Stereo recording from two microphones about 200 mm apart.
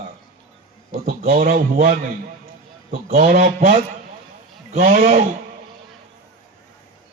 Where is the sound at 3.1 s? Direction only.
40° right (ahead or behind).